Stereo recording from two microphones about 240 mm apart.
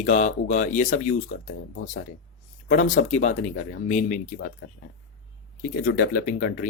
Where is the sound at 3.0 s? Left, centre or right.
Left.